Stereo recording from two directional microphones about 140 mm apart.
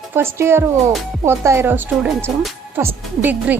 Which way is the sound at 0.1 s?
15° right (ahead or behind).